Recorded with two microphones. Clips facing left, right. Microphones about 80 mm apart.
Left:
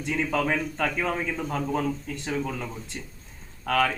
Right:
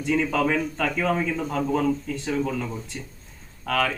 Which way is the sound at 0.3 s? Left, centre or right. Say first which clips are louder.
Right 3 dB; centre.